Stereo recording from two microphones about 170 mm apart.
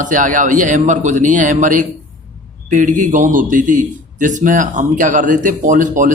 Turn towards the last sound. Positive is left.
turn(degrees=-50)  # may be behind; listen again after turning